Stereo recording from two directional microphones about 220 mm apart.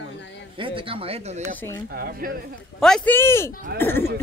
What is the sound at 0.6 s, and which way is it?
Speech, 25° right (ahead or behind).